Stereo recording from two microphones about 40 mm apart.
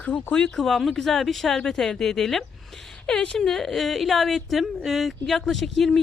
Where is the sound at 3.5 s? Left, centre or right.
Centre.